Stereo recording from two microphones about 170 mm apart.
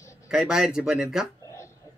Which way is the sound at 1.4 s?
15° left (ahead or behind).